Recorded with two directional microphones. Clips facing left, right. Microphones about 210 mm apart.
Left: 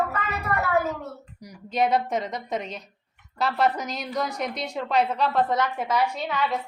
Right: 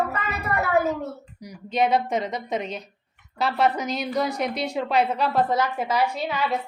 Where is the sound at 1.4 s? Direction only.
Centre (ahead or behind).